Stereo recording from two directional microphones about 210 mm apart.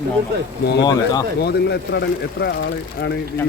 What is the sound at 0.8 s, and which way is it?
Speech, 20° left (ahead or behind).